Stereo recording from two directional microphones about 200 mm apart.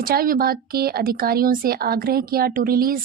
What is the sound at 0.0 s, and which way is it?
A woman's voice, 50° right (ahead or behind).